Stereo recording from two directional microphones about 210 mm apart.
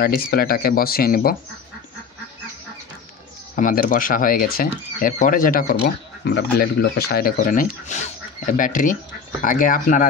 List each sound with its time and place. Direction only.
0.0 s speech: 45° left (ahead or behind)
3.5 s speech: 40° left (ahead or behind)